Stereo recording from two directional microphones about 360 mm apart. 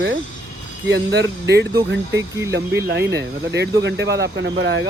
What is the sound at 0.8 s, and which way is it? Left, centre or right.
Speech, right.